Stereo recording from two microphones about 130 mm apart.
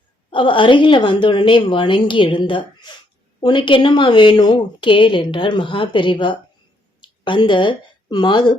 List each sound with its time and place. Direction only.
0.3 s a woman's voice: 40° left (ahead or behind)